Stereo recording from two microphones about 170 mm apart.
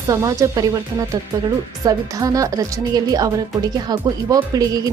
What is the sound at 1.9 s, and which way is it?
Speech, 20° right (ahead or behind).